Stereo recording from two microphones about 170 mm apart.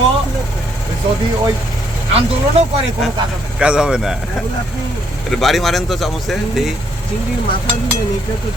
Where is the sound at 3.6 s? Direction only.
5° right (ahead or behind).